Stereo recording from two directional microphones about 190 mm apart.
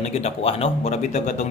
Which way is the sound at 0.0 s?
35° left (ahead or behind).